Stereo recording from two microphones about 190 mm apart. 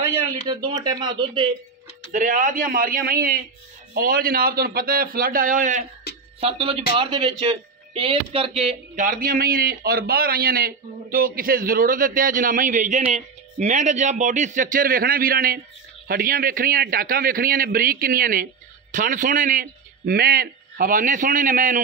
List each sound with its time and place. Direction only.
0.5 s speech: 25° right (ahead or behind)
2.1 s speech: 45° right (ahead or behind)
6.4 s speech: 30° right (ahead or behind); by 21.8 s 45° right (ahead or behind)